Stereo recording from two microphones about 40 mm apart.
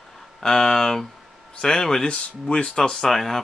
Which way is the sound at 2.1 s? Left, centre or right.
Left.